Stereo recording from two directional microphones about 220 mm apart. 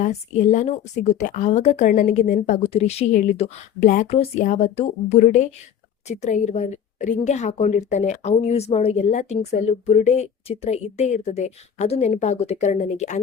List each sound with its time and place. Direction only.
0.0 s a woman's voice: 35° left (ahead or behind)